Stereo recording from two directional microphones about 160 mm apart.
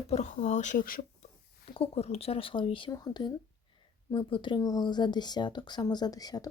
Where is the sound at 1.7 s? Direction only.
40° left (ahead or behind).